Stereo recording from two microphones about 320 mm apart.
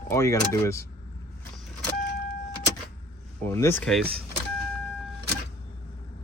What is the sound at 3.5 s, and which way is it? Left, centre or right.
Speech, centre.